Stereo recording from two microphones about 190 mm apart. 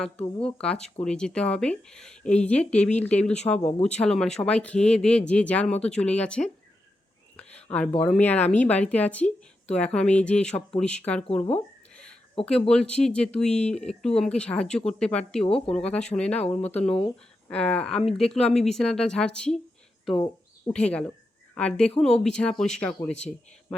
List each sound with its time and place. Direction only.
0.4 s speech: 5° left (ahead or behind)
3.6 s speech: 35° left (ahead or behind)
3.9 s speech: 5° left (ahead or behind)
12.6 s speech: 5° left (ahead or behind)
20.1 s a sound: 20° left (ahead or behind)
20.7 s speech: 5° left (ahead or behind)